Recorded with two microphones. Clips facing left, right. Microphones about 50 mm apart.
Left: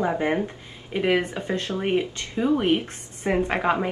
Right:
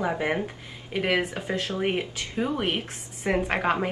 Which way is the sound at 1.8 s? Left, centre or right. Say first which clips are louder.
Left 3 dB; centre.